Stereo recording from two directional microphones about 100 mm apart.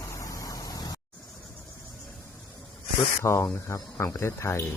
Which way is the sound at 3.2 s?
25° left (ahead or behind).